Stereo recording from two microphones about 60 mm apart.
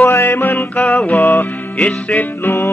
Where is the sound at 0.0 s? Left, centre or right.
Left.